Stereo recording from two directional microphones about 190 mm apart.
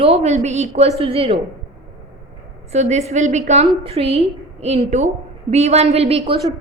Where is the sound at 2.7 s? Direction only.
35° right (ahead or behind).